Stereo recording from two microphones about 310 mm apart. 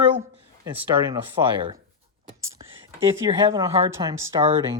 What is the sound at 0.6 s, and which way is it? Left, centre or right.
Speech, centre.